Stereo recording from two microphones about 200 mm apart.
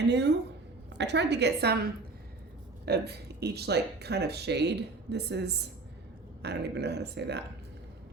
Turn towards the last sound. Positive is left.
turn(degrees=-55)  # may be behind; listen again after turning